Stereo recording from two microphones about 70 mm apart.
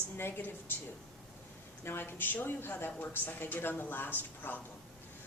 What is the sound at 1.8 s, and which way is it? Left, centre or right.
A woman's voice, left.